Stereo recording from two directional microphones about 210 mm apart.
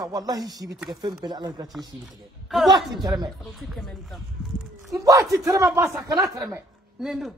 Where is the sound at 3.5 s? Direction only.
Centre (ahead or behind).